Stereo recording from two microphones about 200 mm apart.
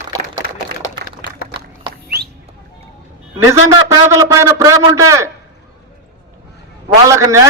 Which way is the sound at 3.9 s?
15° right (ahead or behind).